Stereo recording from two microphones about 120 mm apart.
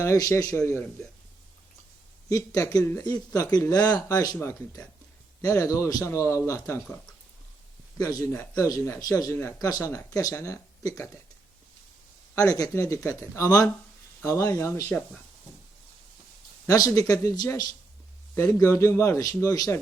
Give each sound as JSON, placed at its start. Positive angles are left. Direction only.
{"t": 0.0, "sound": "speech", "side_deg": 25}
{"t": 2.3, "sound": "speech", "side_deg": 30}
{"t": 7.9, "sound": "speech", "side_deg": 30}
{"t": 12.4, "sound": "speech", "side_deg": 30}
{"t": 16.6, "sound": "speech", "side_deg": 30}